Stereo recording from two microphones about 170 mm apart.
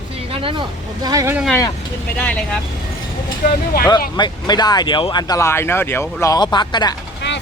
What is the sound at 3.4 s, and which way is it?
Speech, 50° left (ahead or behind).